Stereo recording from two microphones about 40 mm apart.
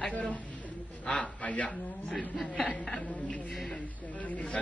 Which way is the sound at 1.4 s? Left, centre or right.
Left.